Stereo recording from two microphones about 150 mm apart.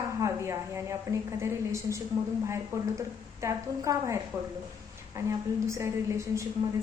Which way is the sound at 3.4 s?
20° right (ahead or behind).